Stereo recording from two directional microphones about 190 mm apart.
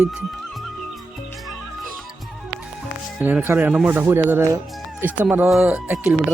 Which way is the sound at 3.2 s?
10° right (ahead or behind).